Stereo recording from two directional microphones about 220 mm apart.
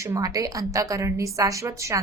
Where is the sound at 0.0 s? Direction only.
15° right (ahead or behind).